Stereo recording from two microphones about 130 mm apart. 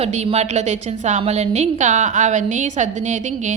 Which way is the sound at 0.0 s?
55° right (ahead or behind).